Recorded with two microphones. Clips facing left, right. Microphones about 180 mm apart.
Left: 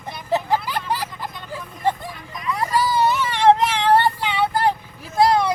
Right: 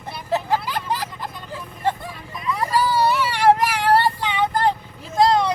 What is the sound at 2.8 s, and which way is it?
Child singing, 20° left (ahead or behind).